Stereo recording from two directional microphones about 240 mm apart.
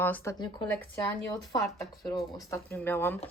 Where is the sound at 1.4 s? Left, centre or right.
Centre.